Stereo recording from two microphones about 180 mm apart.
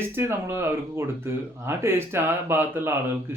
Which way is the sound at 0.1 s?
15° right (ahead or behind).